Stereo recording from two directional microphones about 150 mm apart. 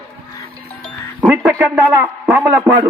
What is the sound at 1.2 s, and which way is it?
A man's voice, 10° right (ahead or behind).